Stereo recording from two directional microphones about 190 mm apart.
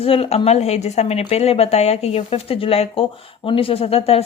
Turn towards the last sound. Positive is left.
turn(degrees=30)  # may be behind; listen again after turning